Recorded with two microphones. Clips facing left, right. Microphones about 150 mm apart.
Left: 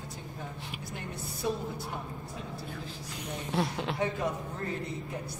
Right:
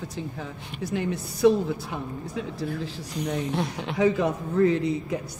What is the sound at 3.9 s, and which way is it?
A woman's voice, 85° right.